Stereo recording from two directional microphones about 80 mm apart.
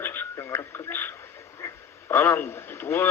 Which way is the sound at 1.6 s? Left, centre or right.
Left.